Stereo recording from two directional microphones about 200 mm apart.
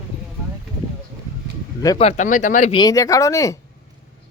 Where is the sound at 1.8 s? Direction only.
30° left (ahead or behind).